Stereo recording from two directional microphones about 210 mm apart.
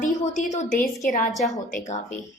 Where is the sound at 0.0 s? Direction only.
35° left (ahead or behind).